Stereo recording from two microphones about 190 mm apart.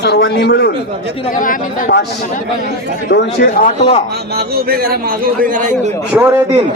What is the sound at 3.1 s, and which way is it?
Speech, 60° left (ahead or behind).